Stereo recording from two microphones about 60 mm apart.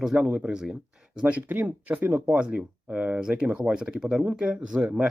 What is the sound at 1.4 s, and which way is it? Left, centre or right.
Speech, right.